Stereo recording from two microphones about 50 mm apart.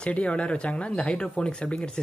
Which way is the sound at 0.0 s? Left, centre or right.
Left.